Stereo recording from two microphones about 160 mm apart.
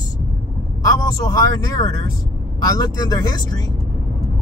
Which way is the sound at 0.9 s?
25° left (ahead or behind).